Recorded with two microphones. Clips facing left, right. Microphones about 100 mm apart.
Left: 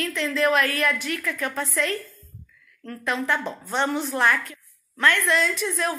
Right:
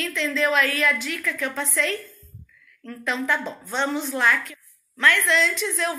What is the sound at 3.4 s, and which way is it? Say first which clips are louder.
Speech: left 1 dB; 15° left (ahead or behind).